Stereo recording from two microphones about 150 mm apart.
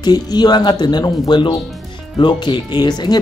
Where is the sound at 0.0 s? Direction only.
25° left (ahead or behind).